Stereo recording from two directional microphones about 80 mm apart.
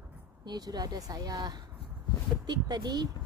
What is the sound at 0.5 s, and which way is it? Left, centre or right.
Speech, right.